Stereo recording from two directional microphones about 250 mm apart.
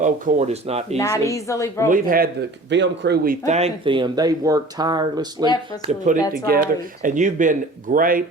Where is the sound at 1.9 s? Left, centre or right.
Right.